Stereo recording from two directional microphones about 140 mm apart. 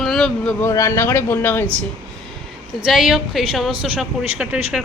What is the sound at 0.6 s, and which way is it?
A man's voice, 20° left (ahead or behind).